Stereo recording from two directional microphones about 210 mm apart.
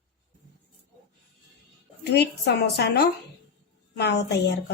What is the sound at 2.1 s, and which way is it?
A woman's voice, 50° left (ahead or behind).